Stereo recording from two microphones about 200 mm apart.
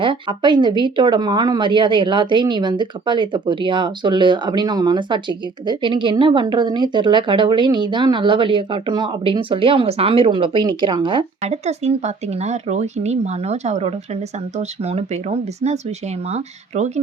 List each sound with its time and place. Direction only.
0.0 s speech: 25° right (ahead or behind)